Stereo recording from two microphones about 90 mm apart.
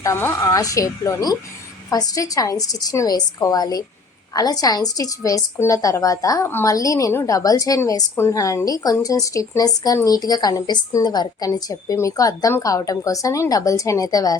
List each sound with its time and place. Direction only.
0.4 s a woman's voice: 40° left (ahead or behind)